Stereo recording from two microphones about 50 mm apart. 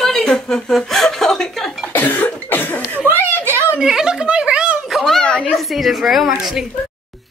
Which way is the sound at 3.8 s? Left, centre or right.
Centre.